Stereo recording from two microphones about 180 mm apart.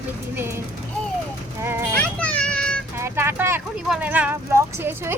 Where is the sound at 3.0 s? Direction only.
15° right (ahead or behind).